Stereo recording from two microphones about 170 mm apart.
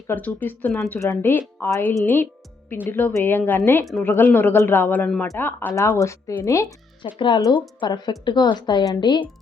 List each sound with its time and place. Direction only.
0.1 s speech: 10° left (ahead or behind)
0.9 s a woman's voice: 20° left (ahead or behind)